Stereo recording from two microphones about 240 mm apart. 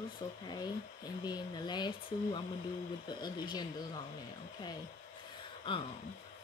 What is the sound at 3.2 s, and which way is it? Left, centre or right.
Speech, centre.